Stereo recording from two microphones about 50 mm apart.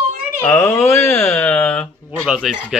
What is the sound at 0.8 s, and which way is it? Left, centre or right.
Speech, left.